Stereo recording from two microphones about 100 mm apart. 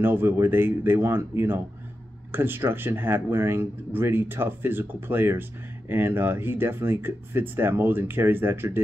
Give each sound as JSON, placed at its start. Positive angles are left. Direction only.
{"t": 0.0, "sound": "speech", "side_deg": -20}